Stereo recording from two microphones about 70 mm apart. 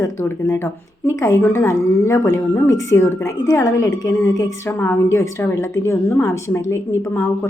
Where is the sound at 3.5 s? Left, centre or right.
Left.